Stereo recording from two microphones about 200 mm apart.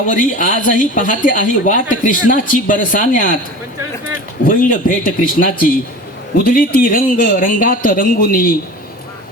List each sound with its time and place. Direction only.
0.1 s a woman's voice: 40° left (ahead or behind)
4.4 s a man's voice: 45° left (ahead or behind)